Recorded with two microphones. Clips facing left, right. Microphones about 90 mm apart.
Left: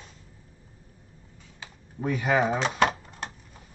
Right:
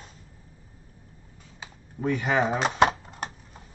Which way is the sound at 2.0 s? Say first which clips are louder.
Even; 5° left (ahead or behind).